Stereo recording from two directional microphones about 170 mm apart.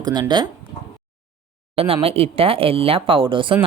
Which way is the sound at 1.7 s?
35° right (ahead or behind).